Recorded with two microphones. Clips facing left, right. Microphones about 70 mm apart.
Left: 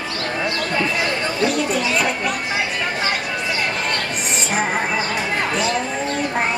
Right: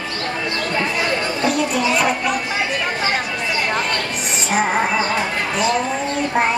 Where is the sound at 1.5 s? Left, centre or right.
Centre.